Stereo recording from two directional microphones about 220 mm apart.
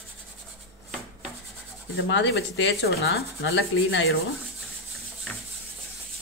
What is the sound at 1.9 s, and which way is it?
Speech, 60° left (ahead or behind).